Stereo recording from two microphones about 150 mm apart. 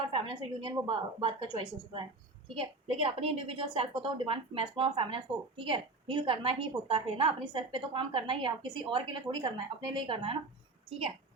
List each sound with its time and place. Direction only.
0.1 s a woman's voice: 35° right (ahead or behind)